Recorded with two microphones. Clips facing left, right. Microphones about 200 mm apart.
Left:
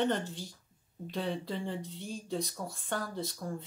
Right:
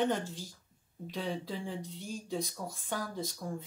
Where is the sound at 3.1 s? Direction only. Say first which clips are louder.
Left 1 dB; 15° right (ahead or behind).